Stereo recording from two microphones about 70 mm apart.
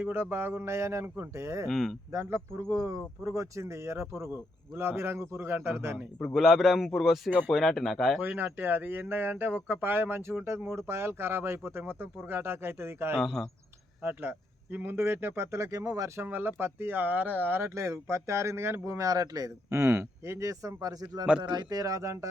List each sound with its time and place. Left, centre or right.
0.0 s speech: right
1.6 s a man's voice: centre
2.1 s speech: right
2.7 s speech: right
6.2 s a man's voice: centre
7.3 s speech: right
7.5 s a man's voice: centre
8.2 s speech: right
13.1 s a man's voice: centre
14.0 s speech: right
16.2 s speech: right
17.7 s speech: right
19.7 s speech: right
21.4 s speech: right